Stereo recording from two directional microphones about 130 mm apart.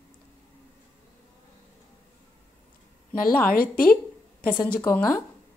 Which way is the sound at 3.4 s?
90° left.